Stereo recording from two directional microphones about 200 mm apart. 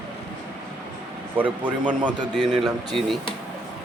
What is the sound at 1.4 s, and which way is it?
A man's voice, 10° right (ahead or behind).